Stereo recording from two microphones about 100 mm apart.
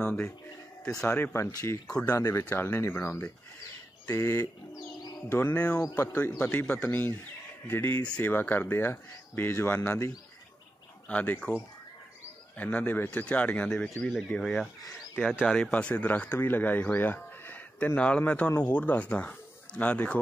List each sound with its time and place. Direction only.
0.0 s speech: 15° left (ahead or behind)
3.6 s bird: 30° left (ahead or behind)
5.3 s speech: 20° left (ahead or behind)
11.1 s speech: 15° left (ahead or behind)
12.5 s speech: 15° left (ahead or behind)